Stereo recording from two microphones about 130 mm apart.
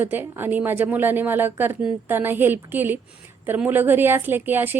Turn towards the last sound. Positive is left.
turn(degrees=-15)  # may be behind; listen again after turning